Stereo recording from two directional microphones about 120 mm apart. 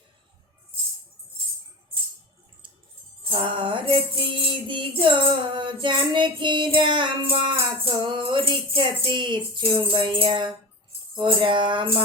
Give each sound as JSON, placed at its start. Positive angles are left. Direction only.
{"t": 3.2, "sound": "music", "side_deg": -45}